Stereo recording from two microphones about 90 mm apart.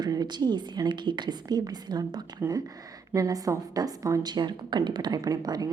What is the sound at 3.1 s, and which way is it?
A woman's voice, 40° right (ahead or behind).